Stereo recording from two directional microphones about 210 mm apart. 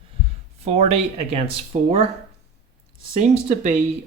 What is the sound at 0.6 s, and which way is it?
Speech, 30° right (ahead or behind).